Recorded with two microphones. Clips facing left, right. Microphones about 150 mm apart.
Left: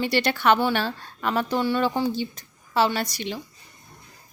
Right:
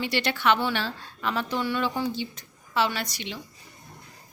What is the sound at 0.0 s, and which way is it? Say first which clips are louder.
A woman's voice: left 4 dB; 40° left (ahead or behind).